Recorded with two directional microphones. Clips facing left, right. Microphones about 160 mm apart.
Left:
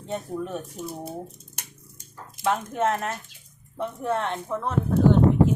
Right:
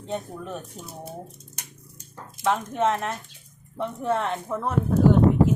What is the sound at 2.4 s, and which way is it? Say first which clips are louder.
Speech: right 1 dB; centre (ahead or behind).